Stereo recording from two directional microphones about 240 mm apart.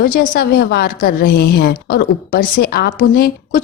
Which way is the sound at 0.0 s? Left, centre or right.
Left.